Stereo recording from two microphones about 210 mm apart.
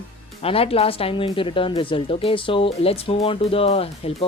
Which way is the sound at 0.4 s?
25° left (ahead or behind).